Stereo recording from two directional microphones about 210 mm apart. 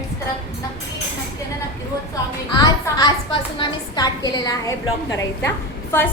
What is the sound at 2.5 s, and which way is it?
A woman's voice, 20° left (ahead or behind).